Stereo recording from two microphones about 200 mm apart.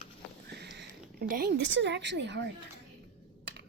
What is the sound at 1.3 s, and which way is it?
A woman's voice, 50° right (ahead or behind).